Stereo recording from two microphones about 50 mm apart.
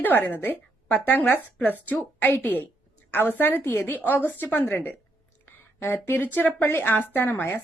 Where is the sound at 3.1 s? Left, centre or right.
Left.